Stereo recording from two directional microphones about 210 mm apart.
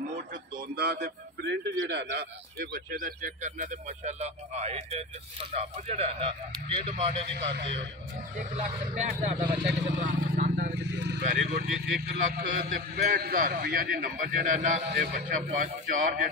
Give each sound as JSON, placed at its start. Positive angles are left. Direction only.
{"t": 0.7, "sound": "a man's voice", "side_deg": -50}
{"t": 7.3, "sound": "a man's voice", "side_deg": -55}
{"t": 8.4, "sound": "a man's voice", "side_deg": -35}
{"t": 10.8, "sound": "vehicle", "side_deg": -55}
{"t": 11.2, "sound": "a man's voice", "side_deg": -50}
{"t": 14.8, "sound": "a man's voice", "side_deg": -50}